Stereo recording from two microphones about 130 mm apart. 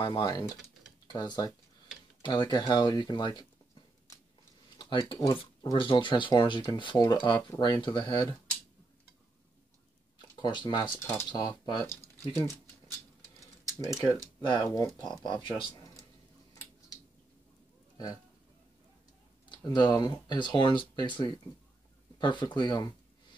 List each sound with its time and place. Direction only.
0.0 s speech: 35° left (ahead or behind)
10.4 s speech: 35° left (ahead or behind)
13.7 s speech: 25° left (ahead or behind)
19.5 s speech: 35° left (ahead or behind)